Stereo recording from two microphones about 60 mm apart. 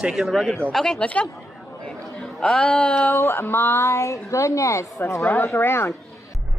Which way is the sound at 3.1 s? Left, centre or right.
Left.